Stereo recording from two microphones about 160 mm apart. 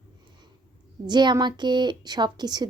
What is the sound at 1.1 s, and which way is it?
A woman's voice, 25° right (ahead or behind).